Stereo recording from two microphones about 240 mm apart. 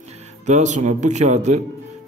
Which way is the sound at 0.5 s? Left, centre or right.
Right.